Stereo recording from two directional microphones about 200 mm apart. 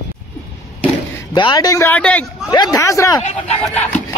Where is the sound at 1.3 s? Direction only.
20° left (ahead or behind).